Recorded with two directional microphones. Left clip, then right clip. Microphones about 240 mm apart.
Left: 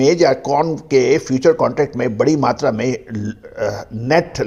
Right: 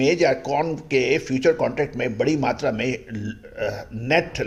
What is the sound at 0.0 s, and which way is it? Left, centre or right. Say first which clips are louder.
Speech: left 6 dB; left.